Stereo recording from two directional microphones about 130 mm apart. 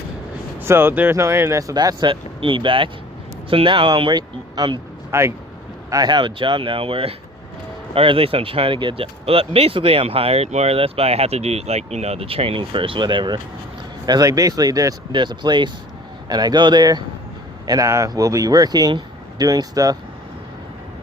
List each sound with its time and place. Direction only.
0.6 s speech: 20° right (ahead or behind); by 4.8 s 35° right (ahead or behind)
5.1 s speech: 20° right (ahead or behind)
5.9 s speech: 35° right (ahead or behind)